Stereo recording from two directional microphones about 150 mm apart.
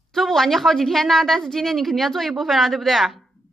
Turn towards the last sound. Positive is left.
turn(degrees=0)  # may be behind; listen again after turning